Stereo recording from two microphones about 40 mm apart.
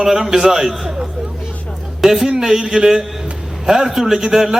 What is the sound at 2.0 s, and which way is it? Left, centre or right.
Speech, centre.